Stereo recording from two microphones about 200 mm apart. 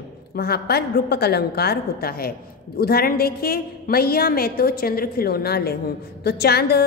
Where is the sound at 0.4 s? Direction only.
50° left (ahead or behind).